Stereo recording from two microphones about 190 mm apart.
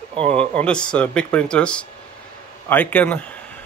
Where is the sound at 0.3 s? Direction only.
5° left (ahead or behind).